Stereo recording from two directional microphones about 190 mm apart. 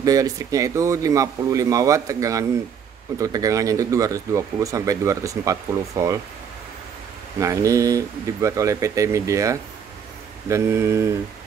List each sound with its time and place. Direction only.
0.0 s speech: 20° right (ahead or behind)
7.3 s speech: 15° right (ahead or behind)